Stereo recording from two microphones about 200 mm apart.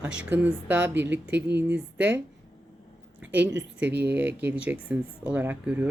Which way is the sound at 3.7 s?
10° right (ahead or behind).